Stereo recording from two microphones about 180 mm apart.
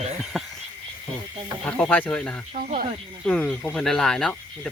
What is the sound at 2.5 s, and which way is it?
Speech, 50° right (ahead or behind).